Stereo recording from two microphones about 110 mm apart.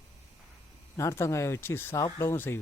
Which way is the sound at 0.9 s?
25° left (ahead or behind).